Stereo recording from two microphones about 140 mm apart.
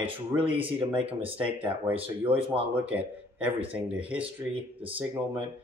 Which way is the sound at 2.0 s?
40° right (ahead or behind).